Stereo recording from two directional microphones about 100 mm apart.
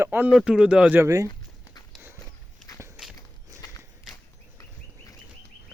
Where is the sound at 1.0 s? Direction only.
35° right (ahead or behind).